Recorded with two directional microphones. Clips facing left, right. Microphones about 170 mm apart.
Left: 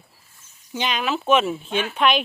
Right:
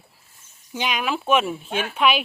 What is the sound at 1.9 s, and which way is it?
Speech, 5° right (ahead or behind).